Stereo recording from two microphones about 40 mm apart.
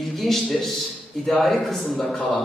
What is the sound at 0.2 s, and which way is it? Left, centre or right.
A man's voice, centre.